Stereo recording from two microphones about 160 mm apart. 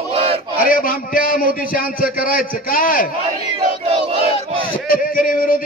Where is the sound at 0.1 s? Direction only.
35° right (ahead or behind).